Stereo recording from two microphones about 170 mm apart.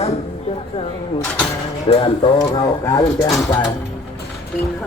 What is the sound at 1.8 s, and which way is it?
Speech, 35° left (ahead or behind).